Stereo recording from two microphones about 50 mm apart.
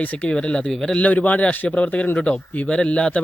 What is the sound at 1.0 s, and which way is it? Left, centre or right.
Speech, left.